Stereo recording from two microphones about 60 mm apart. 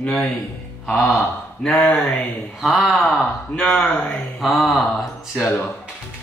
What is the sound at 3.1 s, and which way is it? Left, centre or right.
A man's voice, centre.